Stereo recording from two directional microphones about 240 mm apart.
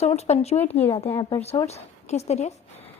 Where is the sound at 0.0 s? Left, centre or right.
Left.